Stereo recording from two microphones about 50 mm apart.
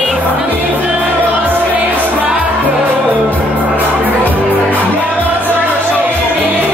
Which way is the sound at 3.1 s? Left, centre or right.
Left.